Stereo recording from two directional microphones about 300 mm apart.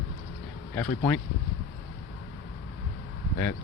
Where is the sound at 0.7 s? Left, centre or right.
Centre.